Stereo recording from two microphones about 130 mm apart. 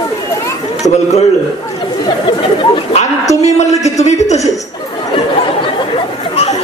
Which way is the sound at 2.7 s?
50° left (ahead or behind).